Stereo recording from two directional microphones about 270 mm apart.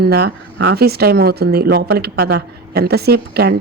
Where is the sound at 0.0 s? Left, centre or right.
Right.